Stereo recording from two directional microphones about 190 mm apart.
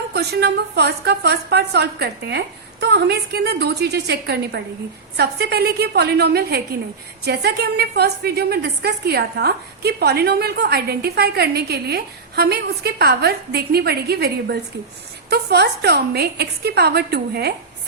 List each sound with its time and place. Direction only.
0.1 s a woman's voice: 60° right (ahead or behind)